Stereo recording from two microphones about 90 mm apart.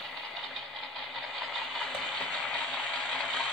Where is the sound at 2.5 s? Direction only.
5° left (ahead or behind).